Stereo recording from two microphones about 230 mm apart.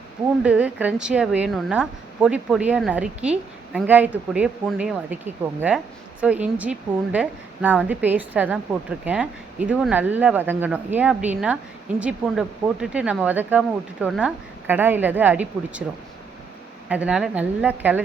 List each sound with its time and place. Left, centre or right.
0.4 s speech: centre
16.9 s speech: centre